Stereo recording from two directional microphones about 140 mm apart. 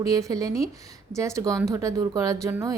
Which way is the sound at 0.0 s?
25° right (ahead or behind).